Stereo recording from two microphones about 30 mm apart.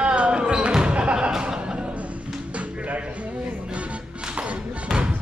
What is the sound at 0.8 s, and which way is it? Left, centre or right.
Music, right.